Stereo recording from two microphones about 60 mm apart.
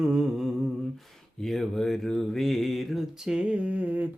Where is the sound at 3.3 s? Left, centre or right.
Centre.